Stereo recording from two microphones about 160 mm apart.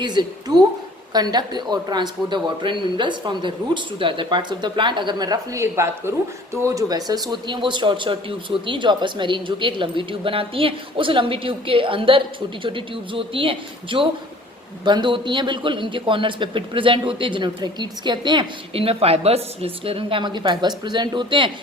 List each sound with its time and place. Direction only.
0.0 s a man's voice: 25° right (ahead or behind)